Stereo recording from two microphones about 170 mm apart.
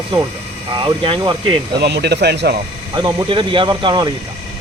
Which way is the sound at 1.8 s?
80° right.